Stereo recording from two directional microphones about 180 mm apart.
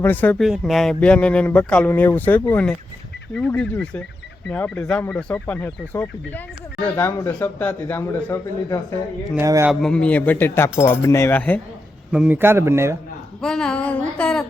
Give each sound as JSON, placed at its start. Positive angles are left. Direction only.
{"t": 0.0, "sound": "speech", "side_deg": 10}
{"t": 0.4, "sound": "speech", "side_deg": 0}
{"t": 9.3, "sound": "a man's voice", "side_deg": -15}
{"t": 9.6, "sound": "speech", "side_deg": 5}
{"t": 12.1, "sound": "a man's voice", "side_deg": -10}
{"t": 13.4, "sound": "a sound", "side_deg": 5}